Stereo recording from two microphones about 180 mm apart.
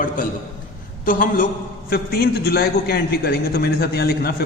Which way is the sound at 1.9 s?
60° left (ahead or behind).